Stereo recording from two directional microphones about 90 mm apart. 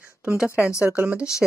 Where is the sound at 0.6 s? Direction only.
30° left (ahead or behind).